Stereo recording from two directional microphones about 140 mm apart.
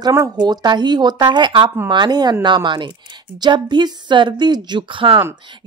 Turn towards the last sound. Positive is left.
turn(degrees=-35)  # may be behind; listen again after turning